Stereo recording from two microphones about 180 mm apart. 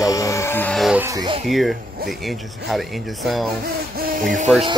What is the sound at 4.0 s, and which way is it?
Speech, 45° right (ahead or behind).